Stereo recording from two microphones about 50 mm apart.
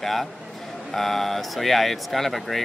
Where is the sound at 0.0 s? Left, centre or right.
Centre.